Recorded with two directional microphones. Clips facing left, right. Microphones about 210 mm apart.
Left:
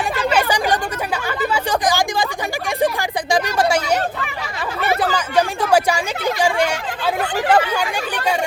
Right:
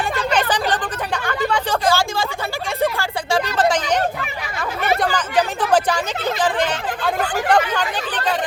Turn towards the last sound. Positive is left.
turn(degrees=10)  # may be behind; listen again after turning